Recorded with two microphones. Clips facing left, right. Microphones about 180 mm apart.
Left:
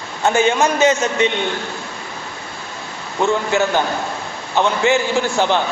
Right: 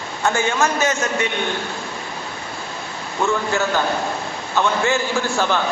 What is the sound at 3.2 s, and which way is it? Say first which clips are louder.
Speech: left 3 dB; 15° left (ahead or behind).